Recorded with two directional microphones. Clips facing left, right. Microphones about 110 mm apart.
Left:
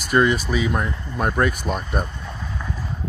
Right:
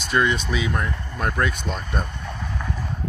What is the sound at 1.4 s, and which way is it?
Vehicle, 5° left (ahead or behind).